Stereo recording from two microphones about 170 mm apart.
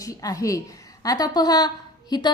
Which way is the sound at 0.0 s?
20° left (ahead or behind).